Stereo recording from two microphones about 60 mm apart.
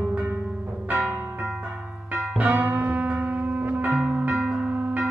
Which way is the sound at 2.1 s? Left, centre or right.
Right.